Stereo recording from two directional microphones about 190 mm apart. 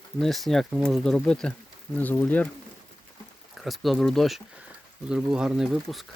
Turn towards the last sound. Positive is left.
turn(degrees=0)  # may be behind; listen again after turning